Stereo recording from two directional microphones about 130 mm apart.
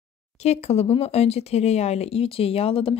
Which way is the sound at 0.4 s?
55° left (ahead or behind).